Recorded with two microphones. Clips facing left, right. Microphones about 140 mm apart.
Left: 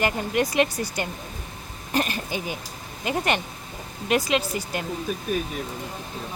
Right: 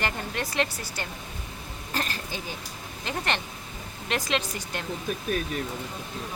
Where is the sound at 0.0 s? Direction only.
15° left (ahead or behind).